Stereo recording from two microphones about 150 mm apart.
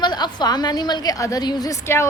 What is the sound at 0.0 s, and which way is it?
A woman's voice, 30° left (ahead or behind).